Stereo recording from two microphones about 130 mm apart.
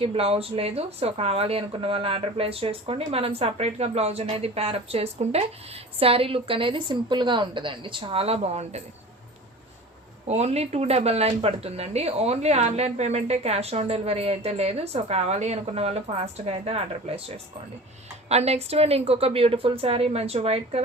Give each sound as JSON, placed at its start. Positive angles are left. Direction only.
{"t": 0.0, "sound": "speech", "side_deg": -50}
{"t": 10.2, "sound": "speech", "side_deg": -55}